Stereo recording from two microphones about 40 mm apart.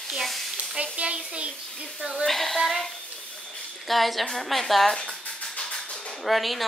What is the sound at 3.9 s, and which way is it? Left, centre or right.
Speech, centre.